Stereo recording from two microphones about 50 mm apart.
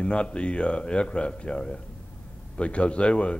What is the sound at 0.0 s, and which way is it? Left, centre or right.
A man's voice, left.